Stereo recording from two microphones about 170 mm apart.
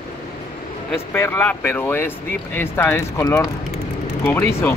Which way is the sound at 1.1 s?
15° left (ahead or behind).